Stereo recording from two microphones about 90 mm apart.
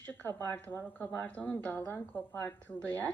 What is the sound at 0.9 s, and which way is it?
Speech, 20° left (ahead or behind).